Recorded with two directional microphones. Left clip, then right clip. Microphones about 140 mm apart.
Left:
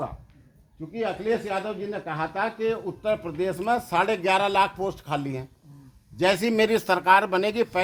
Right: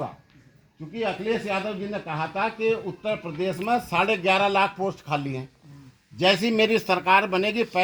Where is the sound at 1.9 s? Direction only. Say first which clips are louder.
Even; 35° left (ahead or behind).